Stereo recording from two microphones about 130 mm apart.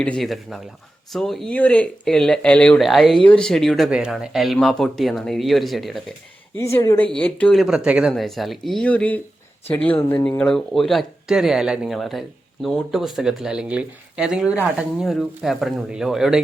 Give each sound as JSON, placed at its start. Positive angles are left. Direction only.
{"t": 0.0, "sound": "speech", "side_deg": 5}
{"t": 6.6, "sound": "speech", "side_deg": 20}